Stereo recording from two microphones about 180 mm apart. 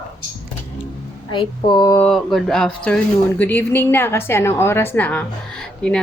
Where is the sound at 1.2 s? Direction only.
25° left (ahead or behind).